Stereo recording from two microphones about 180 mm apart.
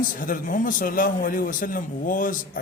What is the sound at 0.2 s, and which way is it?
A man's voice, 50° left (ahead or behind).